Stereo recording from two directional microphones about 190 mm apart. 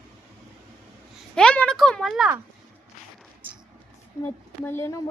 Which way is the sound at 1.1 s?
5° left (ahead or behind).